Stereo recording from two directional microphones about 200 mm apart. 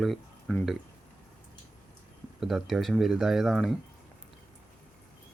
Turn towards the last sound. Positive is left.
turn(degrees=0)  # may be behind; listen again after turning